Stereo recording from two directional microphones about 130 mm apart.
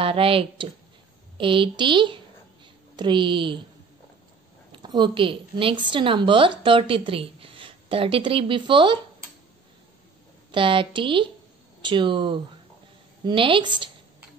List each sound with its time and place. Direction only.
0.0 s a woman's voice: 45° right (ahead or behind)
4.7 s a woman's voice: 35° right (ahead or behind)
10.5 s a woman's voice: 40° right (ahead or behind)